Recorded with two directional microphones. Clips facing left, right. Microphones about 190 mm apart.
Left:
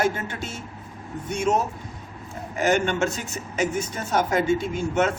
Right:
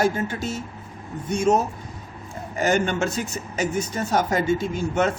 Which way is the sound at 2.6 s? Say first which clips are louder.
Even; 40° right (ahead or behind).